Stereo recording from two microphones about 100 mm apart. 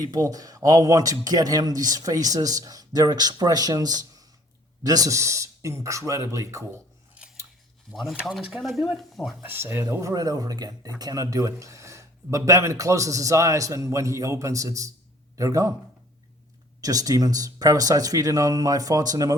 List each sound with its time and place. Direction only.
0.0 s speech: 35° right (ahead or behind)
8.2 s speech: 5° right (ahead or behind)
9.4 s speech: 25° right (ahead or behind)
16.8 s speech: 35° right (ahead or behind)